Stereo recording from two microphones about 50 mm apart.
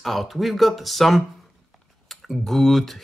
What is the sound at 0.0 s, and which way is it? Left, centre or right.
Speech, centre.